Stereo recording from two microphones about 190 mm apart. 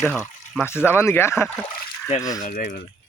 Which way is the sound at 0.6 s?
10° left (ahead or behind).